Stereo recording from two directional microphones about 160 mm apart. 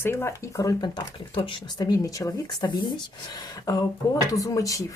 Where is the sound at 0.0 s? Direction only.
15° left (ahead or behind).